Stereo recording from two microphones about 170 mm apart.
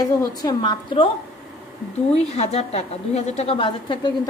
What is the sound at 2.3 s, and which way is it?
A woman's voice, 40° left (ahead or behind).